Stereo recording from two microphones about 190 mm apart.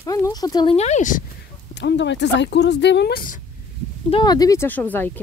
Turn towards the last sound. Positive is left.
turn(degrees=10)  # may be behind; listen again after turning